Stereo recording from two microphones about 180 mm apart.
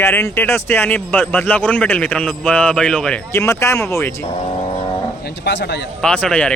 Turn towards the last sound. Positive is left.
turn(degrees=5)  # may be behind; listen again after turning